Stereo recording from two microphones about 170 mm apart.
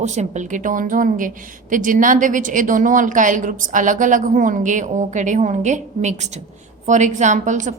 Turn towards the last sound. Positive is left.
turn(degrees=-45)  # may be behind; listen again after turning